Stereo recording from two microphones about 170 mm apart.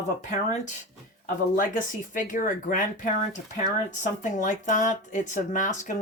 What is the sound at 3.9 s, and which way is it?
Speech, 45° left (ahead or behind).